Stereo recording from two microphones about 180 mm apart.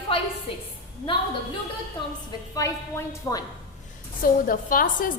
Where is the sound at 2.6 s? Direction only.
15° left (ahead or behind).